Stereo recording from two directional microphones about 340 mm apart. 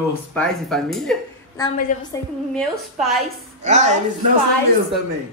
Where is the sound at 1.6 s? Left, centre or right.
Centre.